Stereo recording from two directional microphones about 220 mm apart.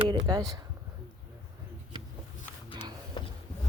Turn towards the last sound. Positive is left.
turn(degrees=20)  # may be behind; listen again after turning